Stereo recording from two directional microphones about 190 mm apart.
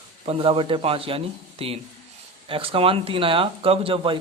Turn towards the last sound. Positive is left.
turn(degrees=-30)  # may be behind; listen again after turning